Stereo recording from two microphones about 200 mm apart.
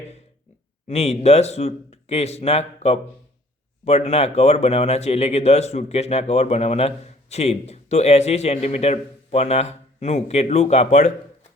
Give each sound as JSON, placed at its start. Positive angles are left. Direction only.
{"t": 0.9, "sound": "a man's voice", "side_deg": 30}